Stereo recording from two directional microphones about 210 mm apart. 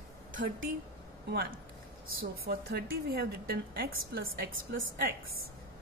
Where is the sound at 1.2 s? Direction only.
45° right (ahead or behind).